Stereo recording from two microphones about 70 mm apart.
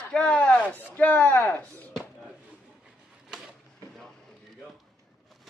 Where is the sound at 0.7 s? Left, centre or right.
Left.